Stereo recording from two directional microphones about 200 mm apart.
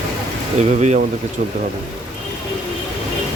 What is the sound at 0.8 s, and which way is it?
Speech, 35° right (ahead or behind).